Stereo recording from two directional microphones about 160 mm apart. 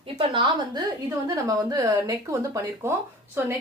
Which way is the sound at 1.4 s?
20° right (ahead or behind).